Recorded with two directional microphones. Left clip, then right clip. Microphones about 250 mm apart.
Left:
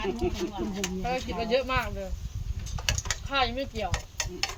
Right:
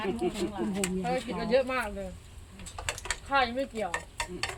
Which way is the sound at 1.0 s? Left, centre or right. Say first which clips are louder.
Left 4 dB; centre.